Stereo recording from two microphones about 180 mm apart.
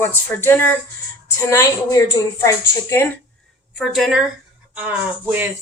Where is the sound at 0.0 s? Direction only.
10° left (ahead or behind).